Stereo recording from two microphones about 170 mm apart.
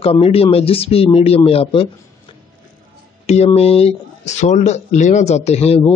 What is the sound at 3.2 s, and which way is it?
Speech, 40° left (ahead or behind).